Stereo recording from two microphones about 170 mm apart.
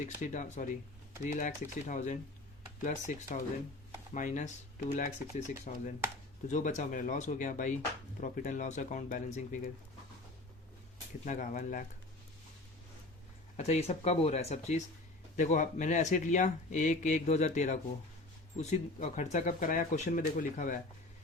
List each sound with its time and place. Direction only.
0.0 s speech: 45° left (ahead or behind)
11.3 s speech: 50° left (ahead or behind)
13.6 s speech: 40° left (ahead or behind)